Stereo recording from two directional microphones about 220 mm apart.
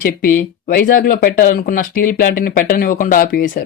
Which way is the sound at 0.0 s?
40° left (ahead or behind).